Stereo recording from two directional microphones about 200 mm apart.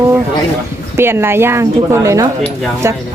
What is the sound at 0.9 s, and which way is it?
Speech, 10° right (ahead or behind).